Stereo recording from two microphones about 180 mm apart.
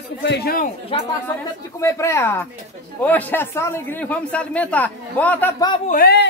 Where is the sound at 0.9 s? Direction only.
30° left (ahead or behind).